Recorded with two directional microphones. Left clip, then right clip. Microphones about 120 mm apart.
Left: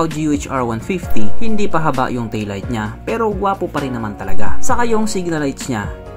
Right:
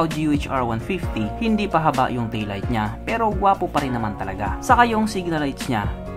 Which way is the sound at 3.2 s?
30° left (ahead or behind).